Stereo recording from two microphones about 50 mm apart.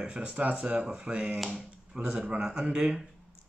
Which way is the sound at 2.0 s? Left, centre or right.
Right.